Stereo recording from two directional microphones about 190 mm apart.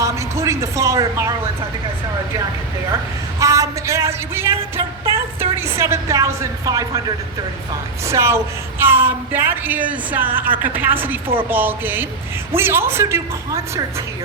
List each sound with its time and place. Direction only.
0.0 s a woman's voice: 15° right (ahead or behind)
3.4 s speech: 15° right (ahead or behind)
5.0 s a sound: 15° right (ahead or behind)
5.5 s a woman's voice: 15° right (ahead or behind)
8.0 s a woman's voice: 15° right (ahead or behind)